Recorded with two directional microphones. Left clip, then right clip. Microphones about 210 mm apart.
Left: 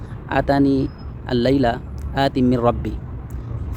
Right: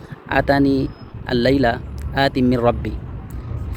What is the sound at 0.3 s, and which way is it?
Speech, 10° left (ahead or behind).